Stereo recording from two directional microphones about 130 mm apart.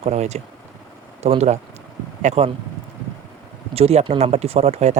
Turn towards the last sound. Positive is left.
turn(degrees=-55)  # may be behind; listen again after turning